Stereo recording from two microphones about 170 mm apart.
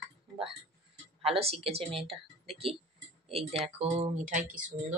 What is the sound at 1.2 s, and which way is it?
Speech, 35° right (ahead or behind).